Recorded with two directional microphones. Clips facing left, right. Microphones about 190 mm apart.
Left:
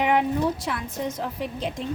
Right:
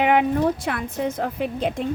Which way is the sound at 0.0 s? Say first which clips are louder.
Right 3 dB; 60° right (ahead or behind).